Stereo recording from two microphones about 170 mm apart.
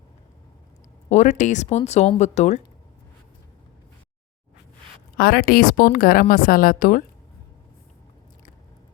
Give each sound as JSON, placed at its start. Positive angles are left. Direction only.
{"t": 1.1, "sound": "speech", "side_deg": 45}
{"t": 5.1, "sound": "a woman's voice", "side_deg": 60}